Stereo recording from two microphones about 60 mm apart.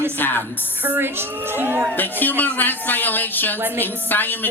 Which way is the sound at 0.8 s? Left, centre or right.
Right.